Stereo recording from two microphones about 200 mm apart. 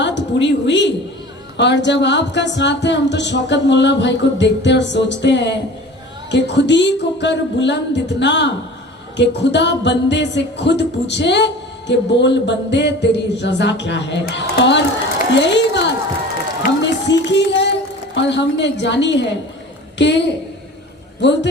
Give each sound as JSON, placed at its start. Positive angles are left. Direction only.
{"t": 0.0, "sound": "a woman's voice", "side_deg": 60}
{"t": 1.5, "sound": "music", "side_deg": 60}
{"t": 15.4, "sound": "speech", "side_deg": 60}
{"t": 20.0, "sound": "music", "side_deg": 60}